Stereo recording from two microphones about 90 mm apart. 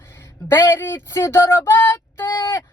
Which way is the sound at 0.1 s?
30° left (ahead or behind).